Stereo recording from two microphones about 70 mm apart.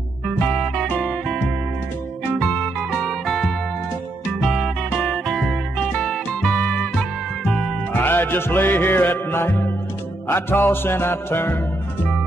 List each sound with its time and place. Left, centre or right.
0.6 s music: centre
2.5 s music: centre
7.9 s music: left